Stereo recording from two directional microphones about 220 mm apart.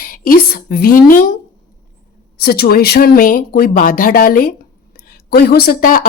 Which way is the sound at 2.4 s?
45° left (ahead or behind).